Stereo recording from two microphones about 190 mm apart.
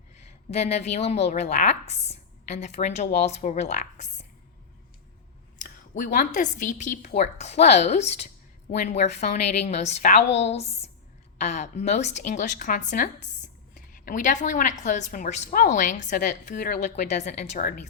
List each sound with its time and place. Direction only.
0.5 s a woman's voice: 35° left (ahead or behind)
5.5 s a woman's voice: 45° left (ahead or behind)
16.9 s a woman's voice: 40° left (ahead or behind)